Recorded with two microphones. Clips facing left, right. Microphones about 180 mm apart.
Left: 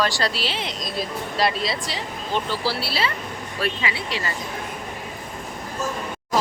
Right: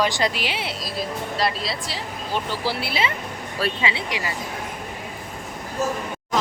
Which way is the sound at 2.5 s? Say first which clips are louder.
Even; 15° right (ahead or behind).